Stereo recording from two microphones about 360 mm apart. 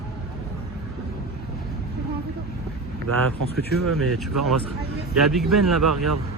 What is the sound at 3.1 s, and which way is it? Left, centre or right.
Speech, right.